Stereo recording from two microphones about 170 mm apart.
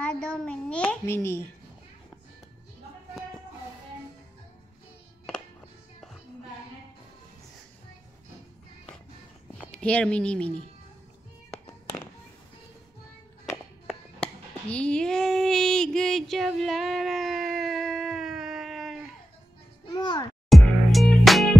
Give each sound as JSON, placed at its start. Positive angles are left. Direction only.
{"t": 0.0, "sound": "a child's voice", "side_deg": 5}
{"t": 9.7, "sound": "speech", "side_deg": 5}
{"t": 13.8, "sound": "child singing", "side_deg": 5}
{"t": 19.9, "sound": "a sound", "side_deg": 25}
{"t": 20.4, "sound": "music", "side_deg": 0}